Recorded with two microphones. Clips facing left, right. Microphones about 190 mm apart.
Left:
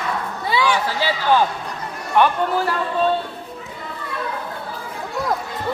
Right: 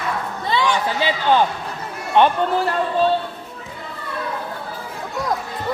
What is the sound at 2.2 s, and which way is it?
Speech, 25° right (ahead or behind).